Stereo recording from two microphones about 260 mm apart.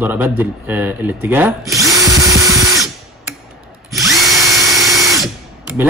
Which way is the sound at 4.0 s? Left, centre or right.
Centre.